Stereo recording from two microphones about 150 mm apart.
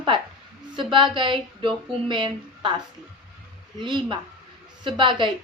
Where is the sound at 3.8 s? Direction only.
30° right (ahead or behind).